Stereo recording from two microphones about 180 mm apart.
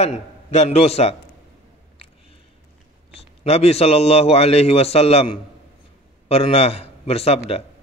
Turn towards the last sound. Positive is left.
turn(degrees=35)  # may be behind; listen again after turning